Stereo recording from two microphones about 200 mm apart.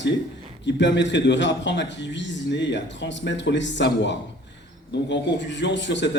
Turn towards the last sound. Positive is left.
turn(degrees=65)  # may be behind; listen again after turning